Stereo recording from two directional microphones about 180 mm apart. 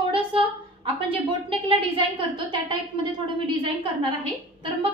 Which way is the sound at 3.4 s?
30° right (ahead or behind).